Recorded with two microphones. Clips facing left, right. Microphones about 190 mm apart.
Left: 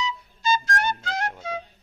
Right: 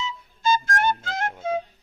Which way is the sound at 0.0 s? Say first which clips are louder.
Right 1 dB; 50° right (ahead or behind).